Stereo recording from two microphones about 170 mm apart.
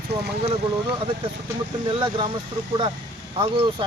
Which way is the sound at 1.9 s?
25° right (ahead or behind).